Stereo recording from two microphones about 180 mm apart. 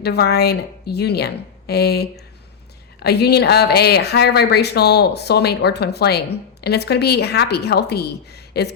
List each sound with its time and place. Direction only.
0.0 s speech: 65° left (ahead or behind)